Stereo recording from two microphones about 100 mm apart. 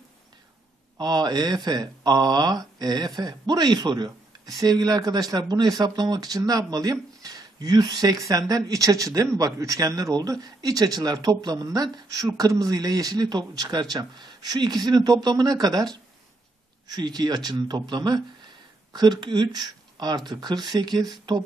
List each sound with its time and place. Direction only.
0.9 s a man's voice: 45° right (ahead or behind)